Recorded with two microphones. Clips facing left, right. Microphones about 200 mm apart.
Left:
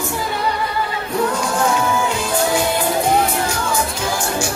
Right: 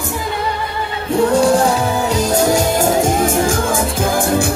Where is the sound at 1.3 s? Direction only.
35° right (ahead or behind).